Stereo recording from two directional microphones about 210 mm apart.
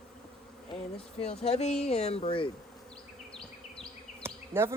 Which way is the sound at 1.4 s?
30° left (ahead or behind).